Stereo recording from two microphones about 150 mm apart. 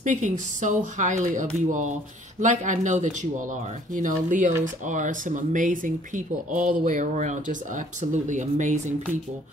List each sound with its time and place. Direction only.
0.0 s speech: 55° right (ahead or behind)